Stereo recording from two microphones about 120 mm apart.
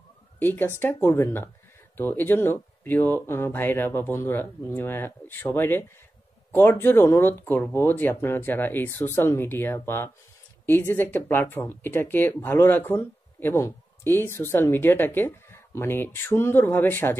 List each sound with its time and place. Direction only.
0.4 s speech: 15° left (ahead or behind)